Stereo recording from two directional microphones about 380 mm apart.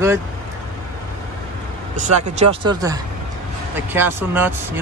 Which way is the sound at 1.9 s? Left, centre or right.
Centre.